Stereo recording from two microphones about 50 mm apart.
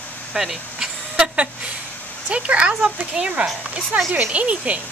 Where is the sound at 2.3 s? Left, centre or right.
Right.